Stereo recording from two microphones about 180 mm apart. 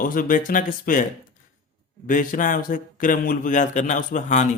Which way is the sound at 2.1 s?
50° left (ahead or behind).